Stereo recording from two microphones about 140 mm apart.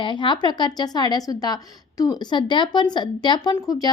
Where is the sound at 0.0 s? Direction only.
35° left (ahead or behind).